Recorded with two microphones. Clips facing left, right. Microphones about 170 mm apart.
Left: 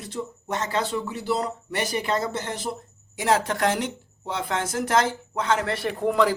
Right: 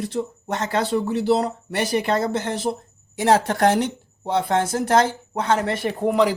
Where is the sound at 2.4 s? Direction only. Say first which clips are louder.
Right 6 dB; 65° right (ahead or behind).